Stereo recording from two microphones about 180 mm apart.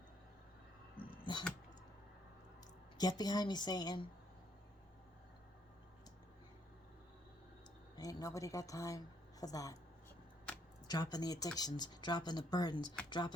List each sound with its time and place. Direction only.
1.2 s a sound: 25° left (ahead or behind)
3.0 s speech: 20° left (ahead or behind)
7.9 s a woman's voice: 20° left (ahead or behind)
10.8 s speech: 20° left (ahead or behind)